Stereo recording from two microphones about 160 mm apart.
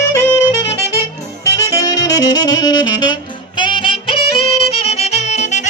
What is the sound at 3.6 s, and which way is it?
Music, 30° left (ahead or behind).